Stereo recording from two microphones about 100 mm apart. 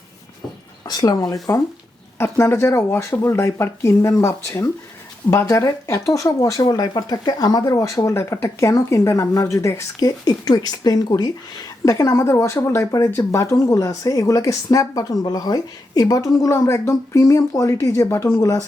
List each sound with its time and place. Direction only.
0.9 s speech: 40° left (ahead or behind)
11.9 s speech: 30° left (ahead or behind)